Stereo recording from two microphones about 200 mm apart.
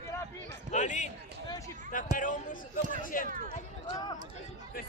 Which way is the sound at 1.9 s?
40° left (ahead or behind).